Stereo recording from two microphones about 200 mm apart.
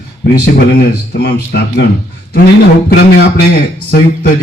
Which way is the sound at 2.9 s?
50° left (ahead or behind).